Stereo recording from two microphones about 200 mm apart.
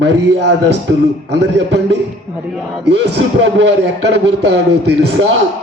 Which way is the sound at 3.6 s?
60° right (ahead or behind).